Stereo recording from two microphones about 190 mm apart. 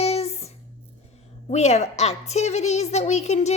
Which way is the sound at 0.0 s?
35° left (ahead or behind).